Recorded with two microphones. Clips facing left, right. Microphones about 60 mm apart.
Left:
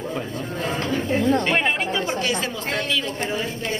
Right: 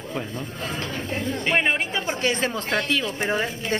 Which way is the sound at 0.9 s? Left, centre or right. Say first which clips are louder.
Left 11 dB; left.